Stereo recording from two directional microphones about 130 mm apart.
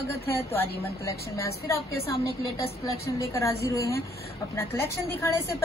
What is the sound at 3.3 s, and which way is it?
A woman's voice, 25° left (ahead or behind).